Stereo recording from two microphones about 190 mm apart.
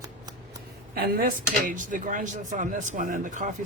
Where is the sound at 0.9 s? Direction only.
50° right (ahead or behind).